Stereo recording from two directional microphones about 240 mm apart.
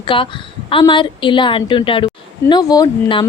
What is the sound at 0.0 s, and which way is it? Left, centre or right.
A woman's voice, left.